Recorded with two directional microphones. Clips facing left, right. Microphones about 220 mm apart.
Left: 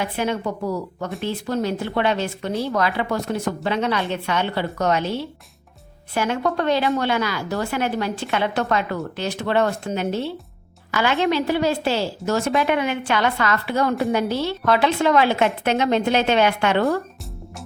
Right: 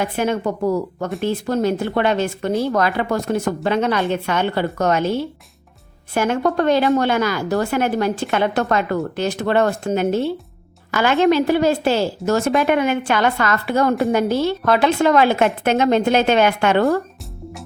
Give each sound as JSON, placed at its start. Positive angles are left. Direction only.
{"t": 0.0, "sound": "a woman's voice", "side_deg": -50}